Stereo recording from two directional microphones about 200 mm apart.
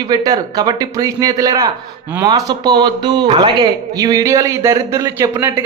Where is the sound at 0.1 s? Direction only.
20° right (ahead or behind).